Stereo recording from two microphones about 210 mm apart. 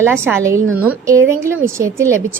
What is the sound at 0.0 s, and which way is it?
A woman's voice, 10° right (ahead or behind).